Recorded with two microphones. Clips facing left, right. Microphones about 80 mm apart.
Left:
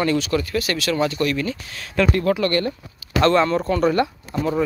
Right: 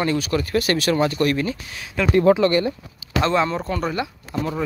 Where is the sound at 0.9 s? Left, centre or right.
Right.